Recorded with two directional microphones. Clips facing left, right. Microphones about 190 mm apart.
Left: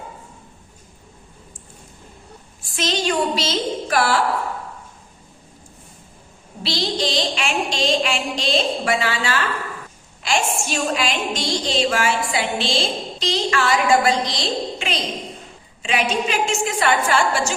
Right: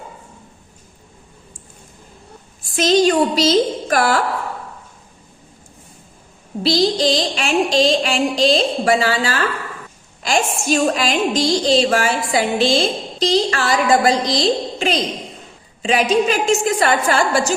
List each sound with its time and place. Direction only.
2.7 s a woman's voice: 40° right (ahead or behind)
6.6 s a woman's voice: 40° right (ahead or behind)